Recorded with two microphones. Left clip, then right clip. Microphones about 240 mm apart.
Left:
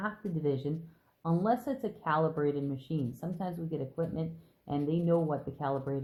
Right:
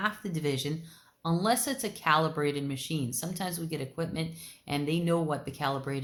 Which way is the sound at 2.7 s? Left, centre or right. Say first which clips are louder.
Right 3 dB; centre.